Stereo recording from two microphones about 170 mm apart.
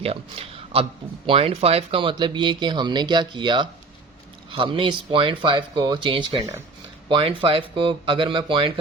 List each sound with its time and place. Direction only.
0.0 s a man's voice: 35° right (ahead or behind)